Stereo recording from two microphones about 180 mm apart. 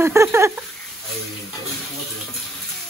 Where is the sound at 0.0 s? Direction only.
15° right (ahead or behind).